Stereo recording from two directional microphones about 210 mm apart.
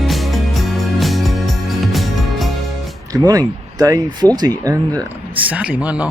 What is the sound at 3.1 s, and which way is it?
Speech, 15° right (ahead or behind).